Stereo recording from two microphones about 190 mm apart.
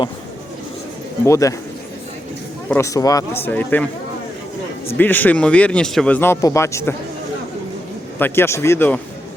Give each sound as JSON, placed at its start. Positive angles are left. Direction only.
{"t": 1.2, "sound": "speech", "side_deg": 15}
{"t": 2.6, "sound": "speech", "side_deg": 15}
{"t": 4.9, "sound": "speech", "side_deg": 10}
{"t": 8.2, "sound": "speech", "side_deg": 15}